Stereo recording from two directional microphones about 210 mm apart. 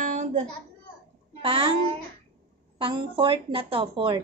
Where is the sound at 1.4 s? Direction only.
25° right (ahead or behind).